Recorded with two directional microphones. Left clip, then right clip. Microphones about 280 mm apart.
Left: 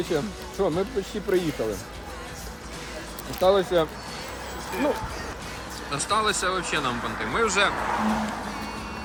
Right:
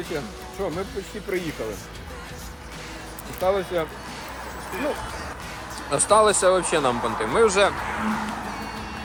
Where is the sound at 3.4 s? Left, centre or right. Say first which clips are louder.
Left 3 dB; left.